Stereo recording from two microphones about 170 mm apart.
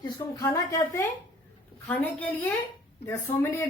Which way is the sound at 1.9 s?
5° left (ahead or behind).